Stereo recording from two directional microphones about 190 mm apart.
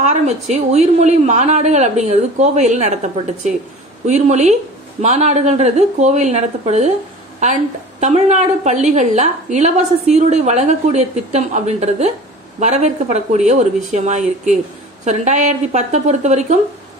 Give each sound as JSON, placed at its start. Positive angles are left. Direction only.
{"t": 0.0, "sound": "a woman's voice", "side_deg": -35}